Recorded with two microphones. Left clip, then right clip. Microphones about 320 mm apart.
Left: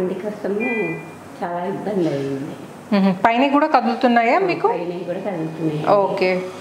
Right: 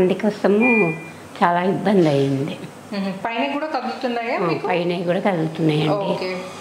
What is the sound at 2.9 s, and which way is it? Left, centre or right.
A woman's voice, left.